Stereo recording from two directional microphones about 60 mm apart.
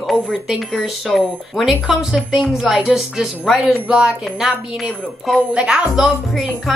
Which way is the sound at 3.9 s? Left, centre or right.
Centre.